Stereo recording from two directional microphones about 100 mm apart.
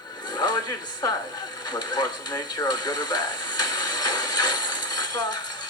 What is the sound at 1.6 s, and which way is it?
Radio, 40° left (ahead or behind).